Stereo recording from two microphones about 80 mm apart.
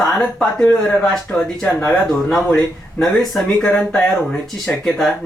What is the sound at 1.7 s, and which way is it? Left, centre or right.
Speech, left.